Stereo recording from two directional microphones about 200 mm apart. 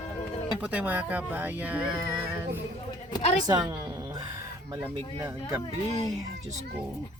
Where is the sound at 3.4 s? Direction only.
20° right (ahead or behind).